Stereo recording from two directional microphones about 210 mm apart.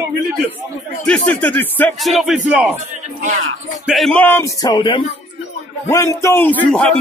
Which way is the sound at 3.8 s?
Centre (ahead or behind).